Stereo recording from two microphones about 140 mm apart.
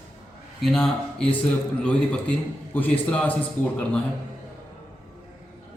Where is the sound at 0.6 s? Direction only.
5° left (ahead or behind).